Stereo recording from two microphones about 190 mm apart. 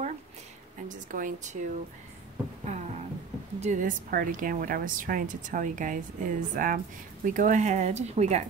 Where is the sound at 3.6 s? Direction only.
45° right (ahead or behind).